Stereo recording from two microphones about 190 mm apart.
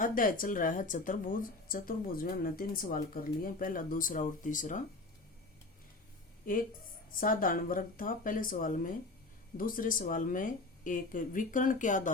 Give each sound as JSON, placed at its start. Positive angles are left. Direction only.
{"t": 0.0, "sound": "speech", "side_deg": 45}
{"t": 7.2, "sound": "speech", "side_deg": 45}